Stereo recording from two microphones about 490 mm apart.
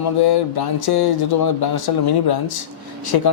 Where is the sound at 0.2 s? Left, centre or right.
Left.